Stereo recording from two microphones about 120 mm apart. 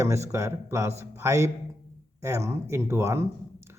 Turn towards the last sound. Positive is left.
turn(degrees=-20)  # may be behind; listen again after turning